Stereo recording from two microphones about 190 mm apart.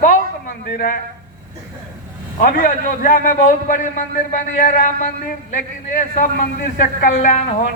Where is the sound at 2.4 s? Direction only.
45° left (ahead or behind).